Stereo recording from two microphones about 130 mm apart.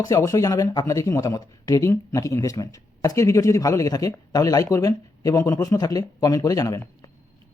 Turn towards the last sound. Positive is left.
turn(degrees=25)  # may be behind; listen again after turning